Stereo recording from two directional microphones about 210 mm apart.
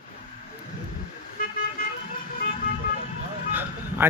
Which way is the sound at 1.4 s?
45° left (ahead or behind).